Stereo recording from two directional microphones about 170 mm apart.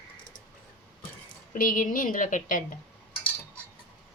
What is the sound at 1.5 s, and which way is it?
A woman's voice, 55° left (ahead or behind).